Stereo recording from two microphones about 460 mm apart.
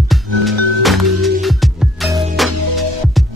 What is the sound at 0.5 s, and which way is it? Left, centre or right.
Music, right.